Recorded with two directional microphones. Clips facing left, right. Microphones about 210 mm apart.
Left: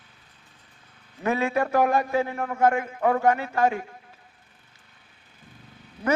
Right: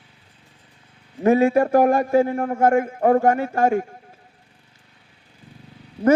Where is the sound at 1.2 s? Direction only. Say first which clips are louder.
Right 8 dB; 45° right (ahead or behind).